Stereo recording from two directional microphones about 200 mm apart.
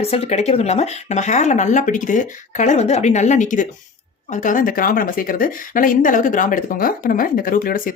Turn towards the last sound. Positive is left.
turn(degrees=45)  # may be behind; listen again after turning